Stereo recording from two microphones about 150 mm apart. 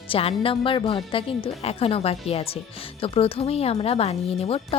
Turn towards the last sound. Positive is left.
turn(degrees=40)  # may be behind; listen again after turning